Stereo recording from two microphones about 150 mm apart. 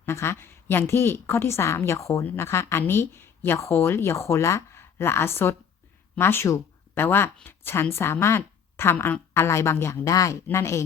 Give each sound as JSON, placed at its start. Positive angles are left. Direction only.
{"t": 0.0, "sound": "a woman's voice", "side_deg": 15}